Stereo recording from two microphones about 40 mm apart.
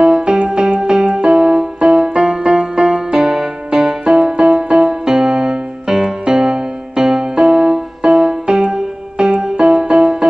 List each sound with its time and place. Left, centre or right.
0.0 s music: centre